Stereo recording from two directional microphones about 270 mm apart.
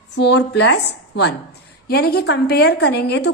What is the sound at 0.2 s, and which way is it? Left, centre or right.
A woman's voice, left.